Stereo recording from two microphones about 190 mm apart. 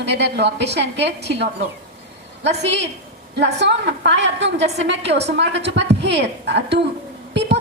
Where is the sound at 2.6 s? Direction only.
65° right (ahead or behind).